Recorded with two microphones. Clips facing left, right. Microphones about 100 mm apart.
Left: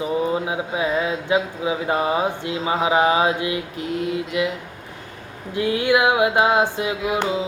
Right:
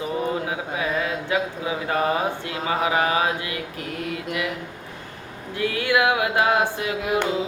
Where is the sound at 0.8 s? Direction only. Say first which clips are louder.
Left 3 dB; 25° left (ahead or behind).